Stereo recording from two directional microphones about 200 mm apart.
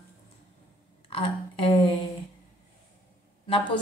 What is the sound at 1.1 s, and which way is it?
Speech, 30° left (ahead or behind).